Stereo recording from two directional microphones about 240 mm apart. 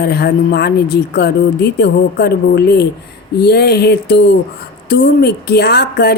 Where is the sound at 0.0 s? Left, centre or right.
Left.